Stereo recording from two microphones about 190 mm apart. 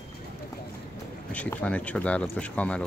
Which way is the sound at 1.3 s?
5° left (ahead or behind).